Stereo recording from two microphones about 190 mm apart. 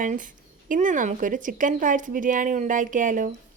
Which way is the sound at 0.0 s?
45° right (ahead or behind).